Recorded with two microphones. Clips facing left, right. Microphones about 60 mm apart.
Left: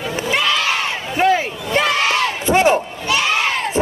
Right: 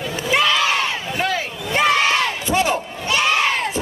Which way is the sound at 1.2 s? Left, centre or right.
Left.